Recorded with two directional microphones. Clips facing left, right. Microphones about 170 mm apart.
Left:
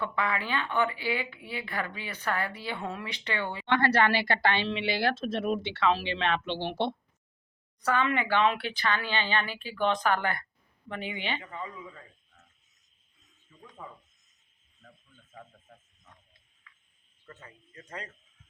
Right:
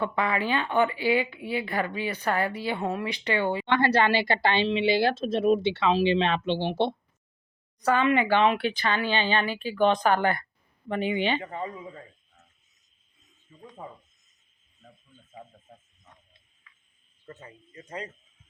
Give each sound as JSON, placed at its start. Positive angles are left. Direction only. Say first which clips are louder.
{"t": 0.2, "sound": "a woman's voice", "louder": "right 4 dB", "side_deg": -15}
{"t": 2.7, "sound": "speech", "louder": "right 7 dB", "side_deg": -35}
{"t": 3.0, "sound": "speech", "louder": "right 7 dB", "side_deg": -10}
{"t": 8.0, "sound": "speech", "louder": "right 5 dB", "side_deg": -15}
{"t": 11.3, "sound": "speech", "louder": "right 6 dB", "side_deg": -40}
{"t": 13.5, "sound": "a sound", "louder": "right 5 dB", "side_deg": -25}
{"t": 14.8, "sound": "a sound", "louder": "right 3 dB", "side_deg": -15}
{"t": 17.2, "sound": "speech", "louder": "right 5 dB", "side_deg": -25}